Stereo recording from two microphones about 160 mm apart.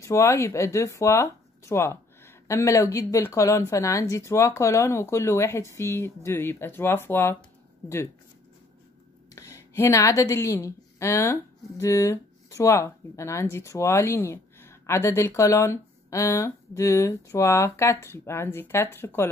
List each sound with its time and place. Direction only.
0.0 s speech: 15° left (ahead or behind)
9.3 s speech: 20° left (ahead or behind)